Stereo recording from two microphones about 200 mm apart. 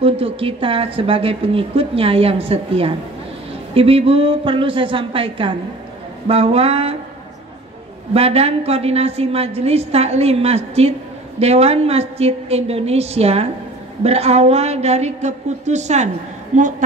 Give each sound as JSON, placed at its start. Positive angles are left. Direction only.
{"t": 0.0, "sound": "a woman's voice", "side_deg": -30}
{"t": 8.1, "sound": "a woman's voice", "side_deg": -30}